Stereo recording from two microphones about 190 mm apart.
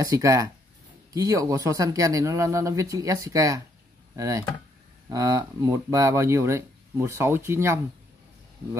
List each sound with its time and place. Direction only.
0.0 s speech: 15° right (ahead or behind)